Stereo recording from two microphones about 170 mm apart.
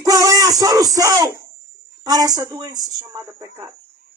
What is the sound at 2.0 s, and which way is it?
Speech, 20° right (ahead or behind).